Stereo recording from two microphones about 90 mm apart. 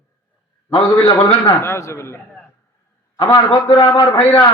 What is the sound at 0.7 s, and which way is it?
Speech, 65° left (ahead or behind).